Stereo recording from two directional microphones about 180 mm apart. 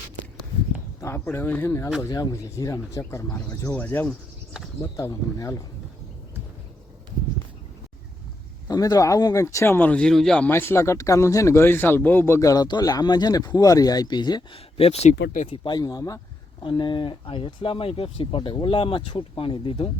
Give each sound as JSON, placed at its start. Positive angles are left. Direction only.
{"t": 1.0, "sound": "speech", "side_deg": 15}
{"t": 8.6, "sound": "speech", "side_deg": 20}
{"t": 15.3, "sound": "speech", "side_deg": 45}
{"t": 15.5, "sound": "speech", "side_deg": 25}